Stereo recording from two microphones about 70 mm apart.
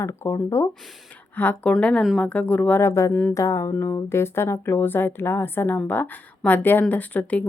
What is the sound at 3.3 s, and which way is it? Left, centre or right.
Music, left.